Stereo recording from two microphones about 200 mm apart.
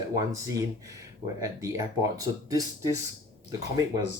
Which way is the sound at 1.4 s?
15° right (ahead or behind).